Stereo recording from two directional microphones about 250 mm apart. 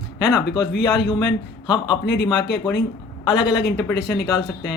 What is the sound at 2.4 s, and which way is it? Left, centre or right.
Speech, left.